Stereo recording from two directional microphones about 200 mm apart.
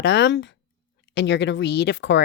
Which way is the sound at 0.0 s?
60° left (ahead or behind).